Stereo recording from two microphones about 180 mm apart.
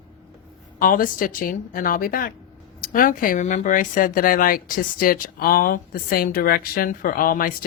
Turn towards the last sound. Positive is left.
turn(degrees=50)  # may be behind; listen again after turning